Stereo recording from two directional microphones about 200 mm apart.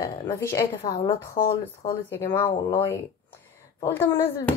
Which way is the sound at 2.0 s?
10° left (ahead or behind).